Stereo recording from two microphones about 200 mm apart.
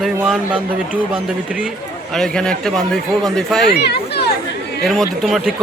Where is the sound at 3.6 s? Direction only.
55° left (ahead or behind).